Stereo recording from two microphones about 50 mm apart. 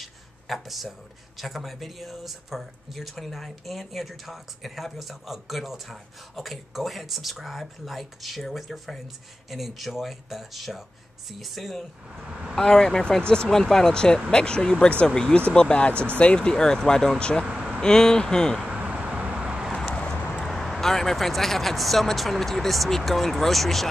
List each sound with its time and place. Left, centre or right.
0.0 s a sound: centre
1.4 s speech: centre
12.3 s speech: centre
12.5 s speech: centre
17.5 s vehicle: right
17.7 s speech: centre
18.8 s a sound: right
19.2 s vehicle: right
19.7 s a sound: centre
20.4 s vehicle: centre
20.8 s speech: centre